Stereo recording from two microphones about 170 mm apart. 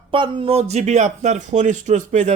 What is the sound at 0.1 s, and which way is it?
A man's voice, 30° right (ahead or behind).